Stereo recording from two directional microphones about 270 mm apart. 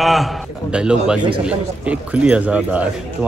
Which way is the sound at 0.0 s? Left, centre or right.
Centre.